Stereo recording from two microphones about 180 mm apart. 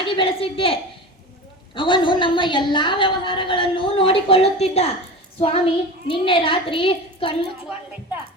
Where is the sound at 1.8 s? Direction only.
25° left (ahead or behind).